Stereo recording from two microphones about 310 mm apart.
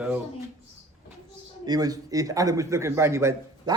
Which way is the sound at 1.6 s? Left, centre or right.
Centre.